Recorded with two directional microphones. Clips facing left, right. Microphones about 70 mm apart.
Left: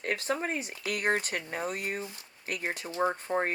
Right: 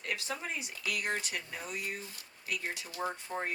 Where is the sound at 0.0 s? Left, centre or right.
Left.